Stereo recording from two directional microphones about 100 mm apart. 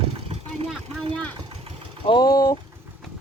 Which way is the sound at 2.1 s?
45° left (ahead or behind).